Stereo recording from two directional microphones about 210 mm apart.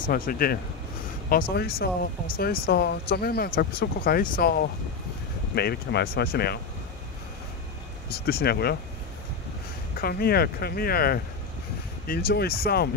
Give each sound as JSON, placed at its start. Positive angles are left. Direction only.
{"t": 0.1, "sound": "speech", "side_deg": 45}
{"t": 8.1, "sound": "speech", "side_deg": 45}
{"t": 9.9, "sound": "speech", "side_deg": 45}